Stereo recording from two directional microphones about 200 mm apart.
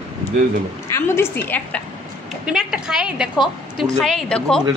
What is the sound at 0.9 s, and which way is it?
Speech, 10° left (ahead or behind).